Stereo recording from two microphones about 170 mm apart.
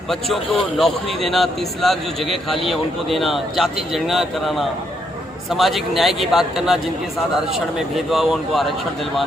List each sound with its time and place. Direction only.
0.8 s a man's voice: centre (ahead or behind)